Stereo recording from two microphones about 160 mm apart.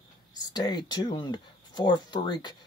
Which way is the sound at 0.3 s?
25° left (ahead or behind).